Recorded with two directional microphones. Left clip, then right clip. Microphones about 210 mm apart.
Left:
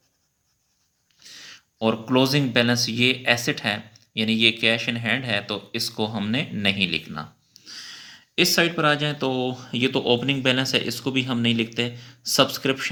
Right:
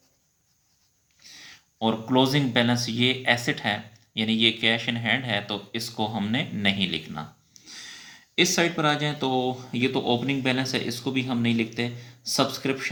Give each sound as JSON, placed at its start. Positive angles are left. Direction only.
{"t": 1.2, "sound": "speech", "side_deg": 45}